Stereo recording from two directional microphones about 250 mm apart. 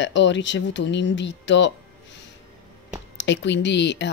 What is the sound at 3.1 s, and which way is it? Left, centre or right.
Speech, left.